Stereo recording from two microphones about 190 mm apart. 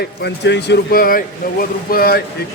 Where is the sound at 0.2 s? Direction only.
65° left (ahead or behind).